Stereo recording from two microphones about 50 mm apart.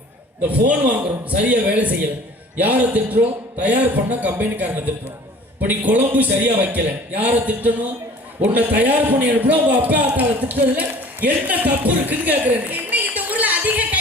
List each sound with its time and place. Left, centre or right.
0.4 s a man's voice: right